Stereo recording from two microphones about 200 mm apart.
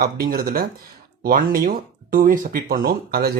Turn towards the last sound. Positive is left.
turn(degrees=-50)  # may be behind; listen again after turning